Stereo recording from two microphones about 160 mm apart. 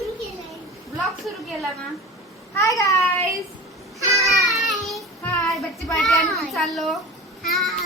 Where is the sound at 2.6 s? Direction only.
20° left (ahead or behind).